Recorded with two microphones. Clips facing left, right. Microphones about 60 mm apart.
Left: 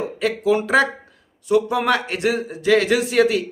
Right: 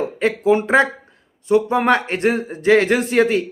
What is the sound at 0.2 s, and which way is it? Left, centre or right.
Speech, right.